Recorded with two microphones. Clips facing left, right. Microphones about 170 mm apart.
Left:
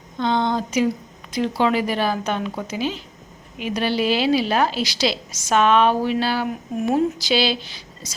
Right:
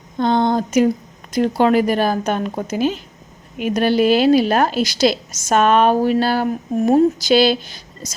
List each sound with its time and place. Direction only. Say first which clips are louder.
0.2 s a woman's voice: right 4 dB; 45° right (ahead or behind)